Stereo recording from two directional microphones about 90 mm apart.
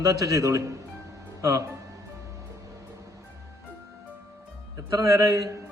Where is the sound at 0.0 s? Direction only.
40° right (ahead or behind).